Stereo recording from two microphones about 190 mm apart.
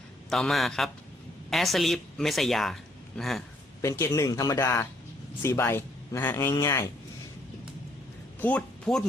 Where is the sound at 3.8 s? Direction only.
15° left (ahead or behind).